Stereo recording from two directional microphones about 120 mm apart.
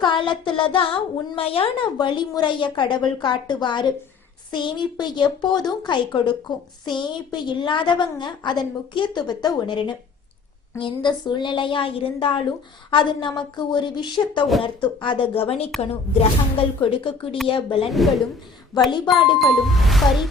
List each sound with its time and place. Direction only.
0.0 s a child's voice: 40° left (ahead or behind)
17.9 s music: centre (ahead or behind)
18.9 s a child's voice: 40° left (ahead or behind)
19.4 s music: centre (ahead or behind)